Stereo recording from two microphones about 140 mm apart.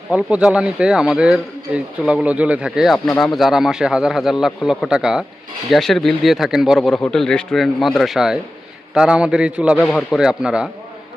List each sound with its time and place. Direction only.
0.1 s a man's voice: 10° right (ahead or behind)
9.8 s speech: 5° left (ahead or behind)
10.2 s a man's voice: 5° right (ahead or behind)